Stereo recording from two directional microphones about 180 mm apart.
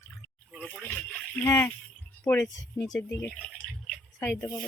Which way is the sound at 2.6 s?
20° left (ahead or behind).